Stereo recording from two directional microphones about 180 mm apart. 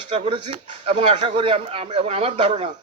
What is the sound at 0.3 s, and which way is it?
A man's voice, 35° right (ahead or behind).